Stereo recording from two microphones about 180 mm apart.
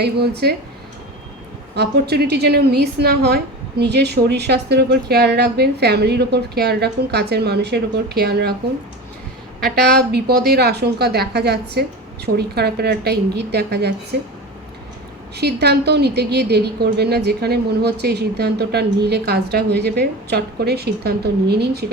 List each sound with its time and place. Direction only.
0.0 s a woman's voice: 65° right (ahead or behind)
1.7 s a woman's voice: 65° right (ahead or behind)
9.9 s a woman's voice: 65° right (ahead or behind)
15.4 s a woman's voice: 65° right (ahead or behind)